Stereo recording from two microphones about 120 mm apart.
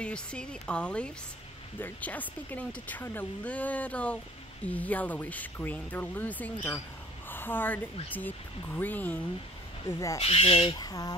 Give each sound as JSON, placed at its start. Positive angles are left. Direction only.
{"t": 0.0, "sound": "speech", "side_deg": 10}
{"t": 9.8, "sound": "speech", "side_deg": 25}
{"t": 10.2, "sound": "speech", "side_deg": 55}
{"t": 10.8, "sound": "speech", "side_deg": 30}